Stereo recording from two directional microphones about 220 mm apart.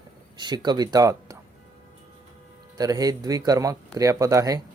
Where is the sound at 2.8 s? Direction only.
15° right (ahead or behind).